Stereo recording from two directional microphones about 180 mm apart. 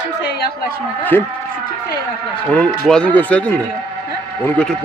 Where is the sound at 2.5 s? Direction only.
5° left (ahead or behind).